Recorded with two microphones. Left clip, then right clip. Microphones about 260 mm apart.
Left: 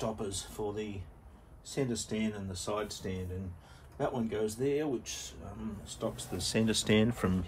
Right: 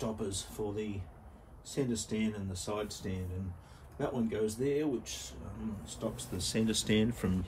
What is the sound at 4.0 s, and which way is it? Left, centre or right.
Speech, centre.